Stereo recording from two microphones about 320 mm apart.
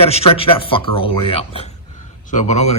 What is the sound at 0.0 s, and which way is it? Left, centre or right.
A man's voice, centre.